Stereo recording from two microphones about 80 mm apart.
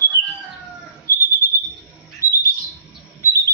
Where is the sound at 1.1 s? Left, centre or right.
Left.